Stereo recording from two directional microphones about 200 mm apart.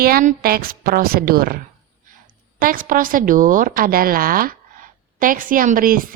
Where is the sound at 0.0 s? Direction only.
45° right (ahead or behind).